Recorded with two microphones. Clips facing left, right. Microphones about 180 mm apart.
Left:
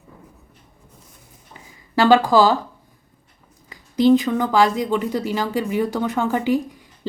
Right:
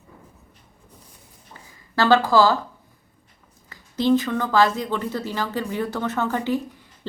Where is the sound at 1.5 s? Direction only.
15° left (ahead or behind).